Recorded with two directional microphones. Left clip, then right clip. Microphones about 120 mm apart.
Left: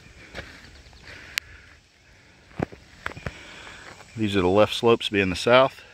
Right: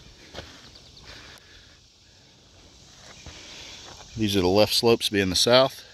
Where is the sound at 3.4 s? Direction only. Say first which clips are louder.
Even; centre (ahead or behind).